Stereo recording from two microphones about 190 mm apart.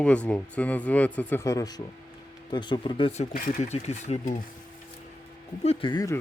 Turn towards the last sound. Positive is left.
turn(degrees=20)  # may be behind; listen again after turning